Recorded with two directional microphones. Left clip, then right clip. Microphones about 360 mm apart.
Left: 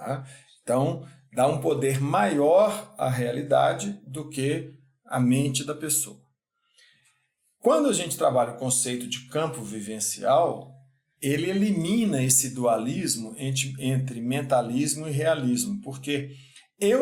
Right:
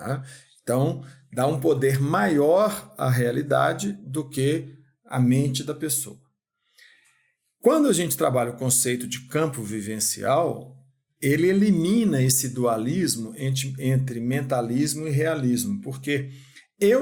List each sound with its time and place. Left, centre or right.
0.6 s speech: right
7.6 s speech: right
16.6 s a sound: right